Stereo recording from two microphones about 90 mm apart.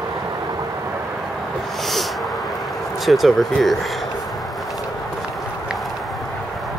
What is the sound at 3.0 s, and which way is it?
Speech, centre (ahead or behind).